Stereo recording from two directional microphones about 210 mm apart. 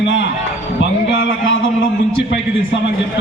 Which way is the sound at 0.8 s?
65° left (ahead or behind).